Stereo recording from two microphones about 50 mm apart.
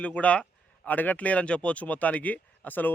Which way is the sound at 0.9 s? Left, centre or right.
Left.